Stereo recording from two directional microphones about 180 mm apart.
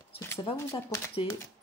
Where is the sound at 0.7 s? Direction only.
15° left (ahead or behind).